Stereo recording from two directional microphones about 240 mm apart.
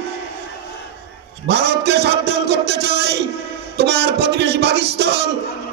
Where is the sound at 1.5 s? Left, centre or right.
Right.